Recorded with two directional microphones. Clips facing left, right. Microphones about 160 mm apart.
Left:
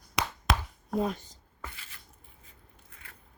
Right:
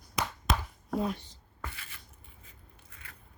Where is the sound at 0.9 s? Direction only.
40° left (ahead or behind).